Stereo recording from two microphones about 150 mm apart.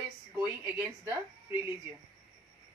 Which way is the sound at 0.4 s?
10° right (ahead or behind).